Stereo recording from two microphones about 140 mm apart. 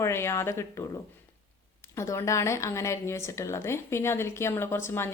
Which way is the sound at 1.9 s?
20° left (ahead or behind).